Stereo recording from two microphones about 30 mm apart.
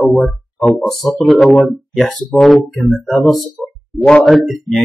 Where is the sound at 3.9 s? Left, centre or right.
Left.